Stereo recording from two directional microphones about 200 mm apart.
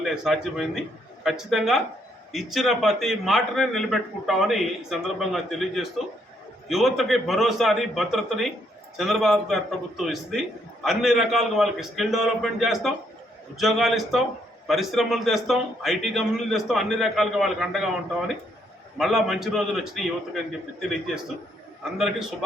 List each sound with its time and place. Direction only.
0.0 s a man's voice: centre (ahead or behind)
18.9 s a man's voice: centre (ahead or behind)
21.9 s a man's voice: centre (ahead or behind)